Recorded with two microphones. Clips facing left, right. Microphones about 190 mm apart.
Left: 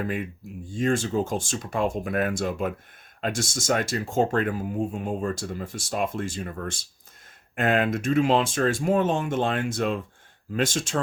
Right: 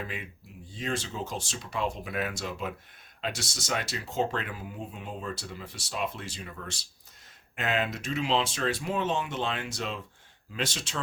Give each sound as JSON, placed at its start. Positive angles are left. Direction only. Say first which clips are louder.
{"t": 0.0, "sound": "speech", "louder": "left 9 dB", "side_deg": 50}